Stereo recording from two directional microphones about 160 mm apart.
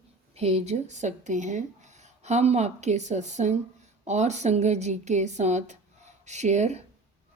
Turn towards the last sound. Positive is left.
turn(degrees=-45)  # may be behind; listen again after turning